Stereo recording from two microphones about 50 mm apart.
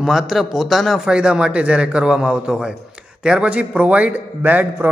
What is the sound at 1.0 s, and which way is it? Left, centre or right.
A man's voice, centre.